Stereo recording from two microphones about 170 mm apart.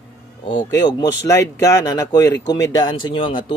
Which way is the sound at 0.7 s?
25° left (ahead or behind).